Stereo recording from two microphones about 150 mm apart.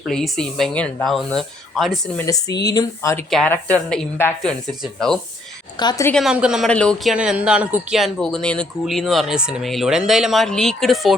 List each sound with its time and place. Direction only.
0.1 s speech: 5° left (ahead or behind)
2.1 s speech: 20° left (ahead or behind)
3.2 s a woman's voice: centre (ahead or behind)
5.7 s speech: 30° left (ahead or behind)
6.2 s speech: 5° right (ahead or behind)
6.7 s speech: 5° left (ahead or behind)